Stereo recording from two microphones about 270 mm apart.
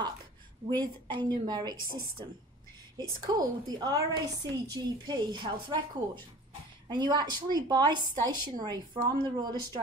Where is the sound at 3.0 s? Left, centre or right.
Centre.